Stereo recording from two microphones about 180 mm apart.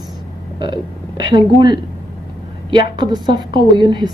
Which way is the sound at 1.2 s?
25° right (ahead or behind).